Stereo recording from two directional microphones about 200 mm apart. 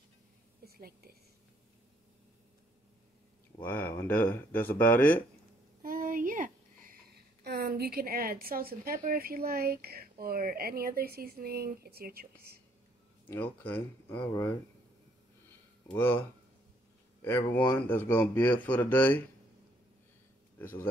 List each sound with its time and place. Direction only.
0.7 s a woman's voice: 50° right (ahead or behind)
3.6 s speech: 10° left (ahead or behind)
5.8 s a sound: 45° right (ahead or behind)
7.4 s a woman's voice: 50° right (ahead or behind)
13.3 s speech: 10° left (ahead or behind)
15.9 s speech: 10° left (ahead or behind)